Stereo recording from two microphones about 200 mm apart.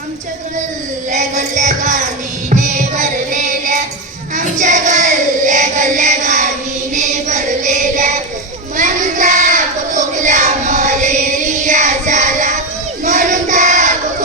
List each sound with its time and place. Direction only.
1.1 s music: 35° right (ahead or behind)
4.4 s child singing: 40° right (ahead or behind)
6.9 s music: 35° right (ahead or behind)
8.7 s child singing: 40° right (ahead or behind)